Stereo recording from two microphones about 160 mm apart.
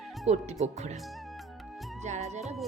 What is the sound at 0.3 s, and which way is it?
Speech, 45° right (ahead or behind).